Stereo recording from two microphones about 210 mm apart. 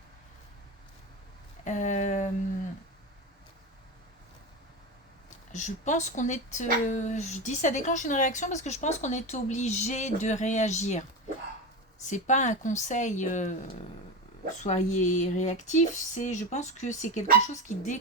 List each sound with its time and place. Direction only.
1.6 s speech: 35° left (ahead or behind)
5.5 s speech: 35° left (ahead or behind)
12.0 s speech: 35° left (ahead or behind)
14.6 s speech: 35° left (ahead or behind)